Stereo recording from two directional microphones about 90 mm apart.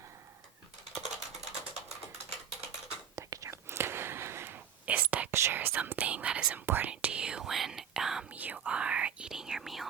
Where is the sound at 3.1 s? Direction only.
35° right (ahead or behind); by 5.3 s 15° right (ahead or behind).